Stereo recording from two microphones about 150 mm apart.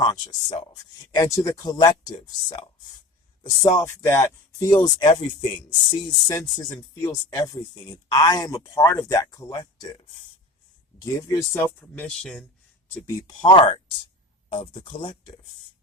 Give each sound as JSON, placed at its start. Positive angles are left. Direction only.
{"t": 0.0, "sound": "speech", "side_deg": 30}
{"t": 11.0, "sound": "speech", "side_deg": 20}
{"t": 13.1, "sound": "speech", "side_deg": 30}